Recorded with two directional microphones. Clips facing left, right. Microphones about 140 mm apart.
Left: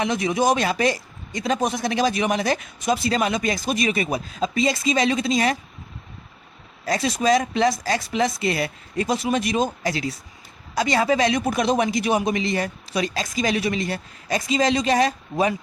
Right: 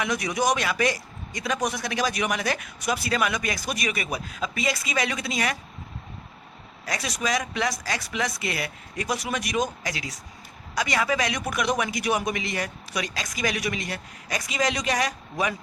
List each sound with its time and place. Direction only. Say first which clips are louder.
0.0 s speech: left 4 dB; 25° left (ahead or behind)
6.8 s speech: left 8 dB; 30° left (ahead or behind)